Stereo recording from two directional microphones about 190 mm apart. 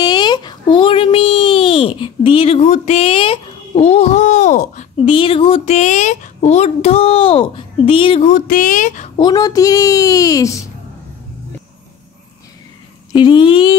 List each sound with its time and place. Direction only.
0.0 s a sound: 25° left (ahead or behind); by 5.1 s 40° left (ahead or behind)
5.1 s speech: 25° left (ahead or behind)
8.4 s speech: 45° left (ahead or behind)
9.2 s speech: 20° left (ahead or behind)
13.1 s speech: 25° left (ahead or behind)